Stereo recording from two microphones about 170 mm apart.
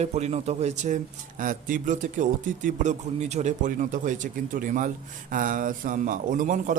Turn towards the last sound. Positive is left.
turn(degrees=-50)  # may be behind; listen again after turning